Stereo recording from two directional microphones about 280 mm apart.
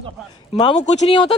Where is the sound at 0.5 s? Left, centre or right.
Centre.